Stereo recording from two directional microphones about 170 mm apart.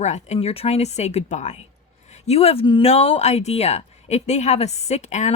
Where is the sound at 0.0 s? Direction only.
40° left (ahead or behind).